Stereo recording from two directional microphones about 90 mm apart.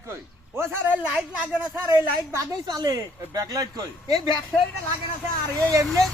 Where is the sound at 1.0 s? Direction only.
10° right (ahead or behind).